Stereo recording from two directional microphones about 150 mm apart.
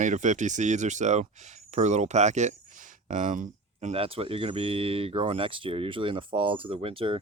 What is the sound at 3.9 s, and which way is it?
Speech, 40° right (ahead or behind).